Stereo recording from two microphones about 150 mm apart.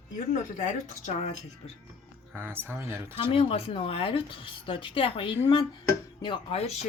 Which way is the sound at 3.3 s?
40° left (ahead or behind).